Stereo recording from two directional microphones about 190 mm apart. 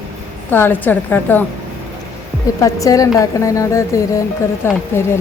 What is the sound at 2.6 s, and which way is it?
A woman's voice, 15° left (ahead or behind).